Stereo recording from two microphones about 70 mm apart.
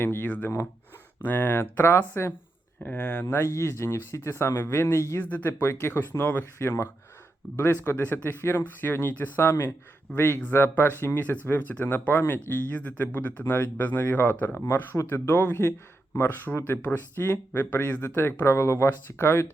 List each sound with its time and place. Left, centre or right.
0.0 s speech: left
0.3 s speech: left
2.8 s speech: left
3.2 s speech: left
5.2 s speech: left
9.4 s speech: left